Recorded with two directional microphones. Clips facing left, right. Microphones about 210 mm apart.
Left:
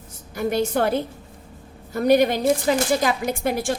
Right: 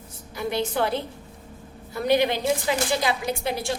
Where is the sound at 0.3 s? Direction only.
45° left (ahead or behind).